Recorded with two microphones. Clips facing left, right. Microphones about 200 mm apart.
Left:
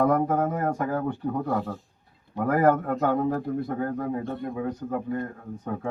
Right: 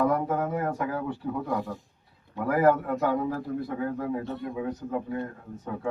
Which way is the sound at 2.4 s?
50° left (ahead or behind).